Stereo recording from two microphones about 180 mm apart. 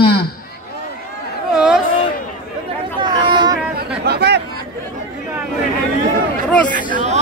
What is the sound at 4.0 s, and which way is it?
Chatter, 65° right (ahead or behind).